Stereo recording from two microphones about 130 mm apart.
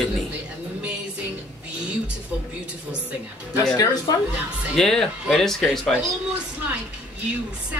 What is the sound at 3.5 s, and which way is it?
Speech, 25° left (ahead or behind).